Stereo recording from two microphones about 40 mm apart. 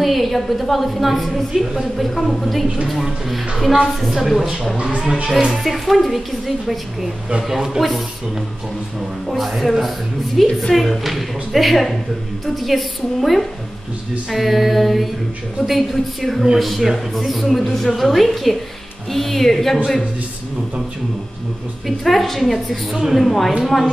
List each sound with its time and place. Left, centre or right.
0.0 s a woman's voice: centre
4.9 s speech: centre
5.6 s a woman's voice: centre
9.3 s a woman's voice: centre
21.8 s a woman's voice: centre